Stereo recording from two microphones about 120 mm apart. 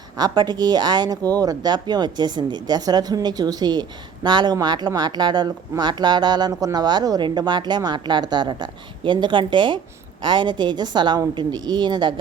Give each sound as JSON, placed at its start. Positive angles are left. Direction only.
{"t": 0.2, "sound": "speech", "side_deg": -35}